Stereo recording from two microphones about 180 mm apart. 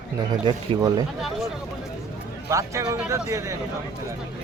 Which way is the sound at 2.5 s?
15° right (ahead or behind).